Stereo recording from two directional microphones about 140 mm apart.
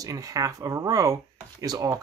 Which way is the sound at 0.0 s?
25° right (ahead or behind).